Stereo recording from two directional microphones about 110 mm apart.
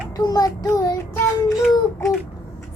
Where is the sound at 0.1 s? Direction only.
35° left (ahead or behind).